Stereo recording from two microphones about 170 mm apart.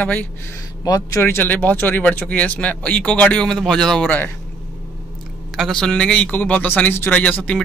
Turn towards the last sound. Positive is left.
turn(degrees=5)  # may be behind; listen again after turning